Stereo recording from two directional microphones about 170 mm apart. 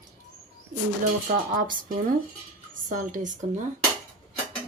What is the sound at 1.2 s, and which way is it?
Speech, 50° right (ahead or behind).